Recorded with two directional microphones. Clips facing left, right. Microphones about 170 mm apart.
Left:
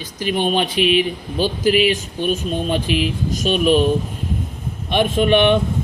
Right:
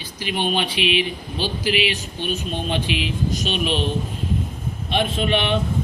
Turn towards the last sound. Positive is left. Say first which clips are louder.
# left 7 dB
turn(degrees=55)  # may be behind; listen again after turning